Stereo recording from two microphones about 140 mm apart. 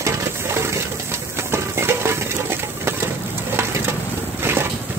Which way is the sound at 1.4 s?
20° right (ahead or behind).